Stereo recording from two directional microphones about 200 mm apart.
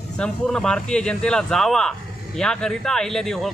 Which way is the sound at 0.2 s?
5° left (ahead or behind).